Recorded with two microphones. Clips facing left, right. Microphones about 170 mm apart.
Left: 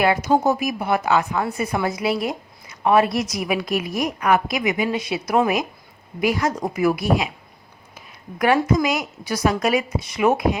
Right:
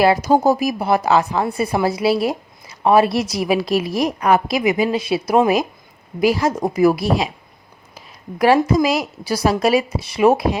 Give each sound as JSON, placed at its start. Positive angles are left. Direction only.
{"t": 0.0, "sound": "a woman's voice", "side_deg": -35}
{"t": 7.9, "sound": "a woman's voice", "side_deg": -30}